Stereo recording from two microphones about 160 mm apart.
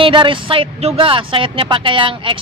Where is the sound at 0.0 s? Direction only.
30° right (ahead or behind).